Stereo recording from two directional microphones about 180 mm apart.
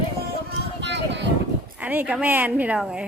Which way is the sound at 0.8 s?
75° right (ahead or behind).